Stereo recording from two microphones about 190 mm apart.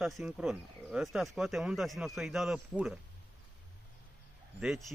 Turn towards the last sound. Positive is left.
turn(degrees=0)  # may be behind; listen again after turning